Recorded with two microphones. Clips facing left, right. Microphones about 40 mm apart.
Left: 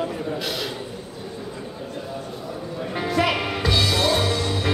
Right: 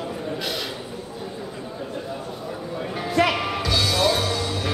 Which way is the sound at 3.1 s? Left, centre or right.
Centre.